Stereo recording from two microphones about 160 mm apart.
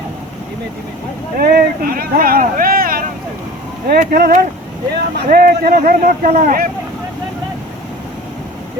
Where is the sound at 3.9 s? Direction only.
75° right (ahead or behind); by 6.6 s 55° right (ahead or behind).